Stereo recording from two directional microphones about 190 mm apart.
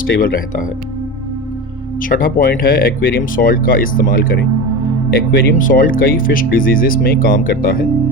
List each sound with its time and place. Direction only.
0.0 s speech: 50° left (ahead or behind)
2.0 s speech: 45° left (ahead or behind)